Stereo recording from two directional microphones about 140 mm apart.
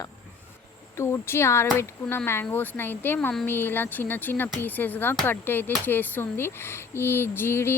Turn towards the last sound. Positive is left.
turn(degrees=15)  # may be behind; listen again after turning